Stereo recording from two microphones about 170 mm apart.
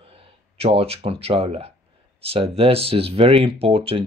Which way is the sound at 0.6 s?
35° right (ahead or behind).